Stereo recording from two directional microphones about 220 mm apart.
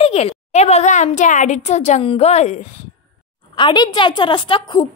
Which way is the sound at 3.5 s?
20° left (ahead or behind).